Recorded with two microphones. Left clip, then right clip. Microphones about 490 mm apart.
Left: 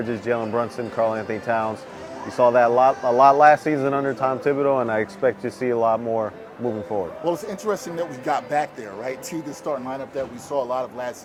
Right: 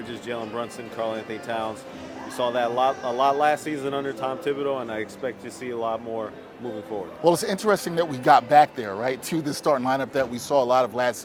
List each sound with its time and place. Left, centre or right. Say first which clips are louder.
0.1 s speech: left 7 dB; left
7.3 s a man's voice: right 7 dB; right